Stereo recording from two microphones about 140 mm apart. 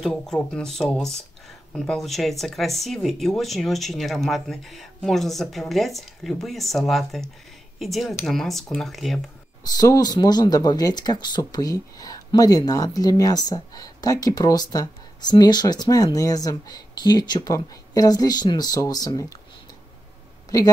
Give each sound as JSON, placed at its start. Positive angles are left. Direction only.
{"t": 0.0, "sound": "speech", "side_deg": 5}
{"t": 9.6, "sound": "speech", "side_deg": 25}